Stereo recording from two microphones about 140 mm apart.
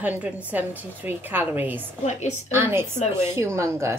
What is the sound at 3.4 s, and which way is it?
Speech, 20° right (ahead or behind).